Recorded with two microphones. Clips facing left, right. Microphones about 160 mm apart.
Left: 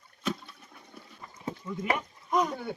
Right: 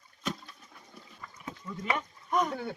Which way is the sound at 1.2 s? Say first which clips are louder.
Left 6 dB; 25° left (ahead or behind).